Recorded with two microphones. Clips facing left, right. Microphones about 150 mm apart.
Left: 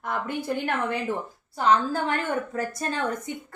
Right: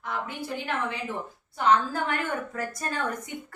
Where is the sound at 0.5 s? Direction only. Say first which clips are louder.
Left 1 dB; 55° left (ahead or behind).